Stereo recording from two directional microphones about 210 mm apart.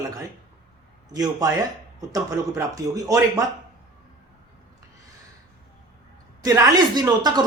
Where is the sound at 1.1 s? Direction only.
15° right (ahead or behind).